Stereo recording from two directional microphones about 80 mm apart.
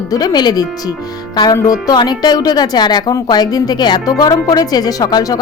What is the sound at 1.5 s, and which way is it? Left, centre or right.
Speech, left.